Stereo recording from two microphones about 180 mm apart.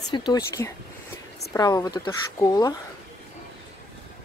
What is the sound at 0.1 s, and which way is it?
Speech, 25° left (ahead or behind).